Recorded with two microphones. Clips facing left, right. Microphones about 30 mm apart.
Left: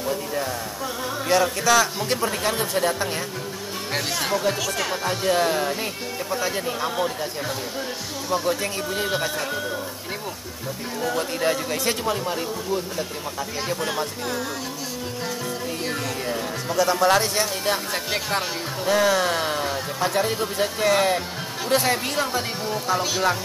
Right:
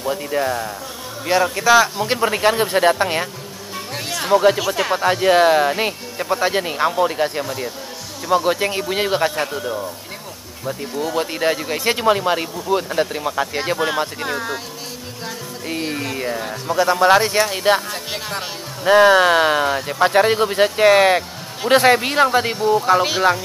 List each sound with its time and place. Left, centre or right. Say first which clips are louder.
0.0 s a man's voice: right 5 dB; right
1.2 s a man's voice: right 4 dB; centre; by 3.3 s right
4.6 s a man's voice: right 6 dB; right
5.0 s speech: right 8 dB; right
8.5 s speech: right 5 dB; right
11.1 s a man's voice: right 4 dB; right
12.0 s speech: right 8 dB; right
13.7 s a man's voice: right 6 dB; right
15.8 s a sound: right 6 dB; right
16.7 s a man's voice: right 5 dB; right
17.4 s speech: right 7 dB; right
18.9 s speech: right 9 dB; right
22.6 s speech: right 10 dB; centre
22.8 s speech: right 4 dB; right